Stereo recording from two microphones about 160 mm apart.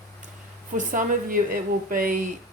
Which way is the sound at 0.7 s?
55° right (ahead or behind).